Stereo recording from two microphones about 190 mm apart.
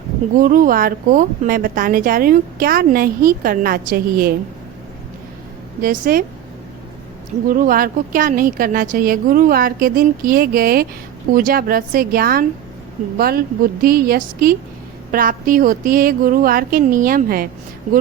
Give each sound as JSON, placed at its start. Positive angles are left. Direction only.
{"t": 0.4, "sound": "a woman's voice", "side_deg": -45}
{"t": 5.8, "sound": "a woman's voice", "side_deg": -50}
{"t": 7.5, "sound": "a woman's voice", "side_deg": -45}